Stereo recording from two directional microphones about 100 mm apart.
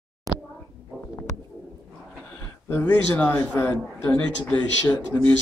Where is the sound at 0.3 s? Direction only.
35° right (ahead or behind).